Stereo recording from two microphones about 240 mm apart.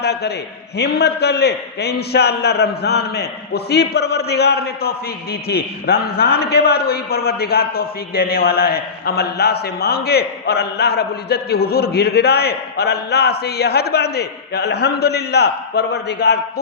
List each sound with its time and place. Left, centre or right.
0.0 s a man's voice: left